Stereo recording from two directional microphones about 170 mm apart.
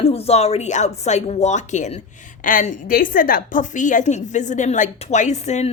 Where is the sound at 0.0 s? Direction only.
35° left (ahead or behind).